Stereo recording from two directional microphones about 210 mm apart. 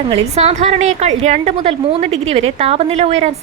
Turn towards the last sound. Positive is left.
turn(degrees=-30)  # may be behind; listen again after turning